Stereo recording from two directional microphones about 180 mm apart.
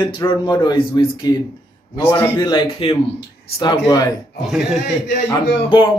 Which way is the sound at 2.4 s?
25° left (ahead or behind).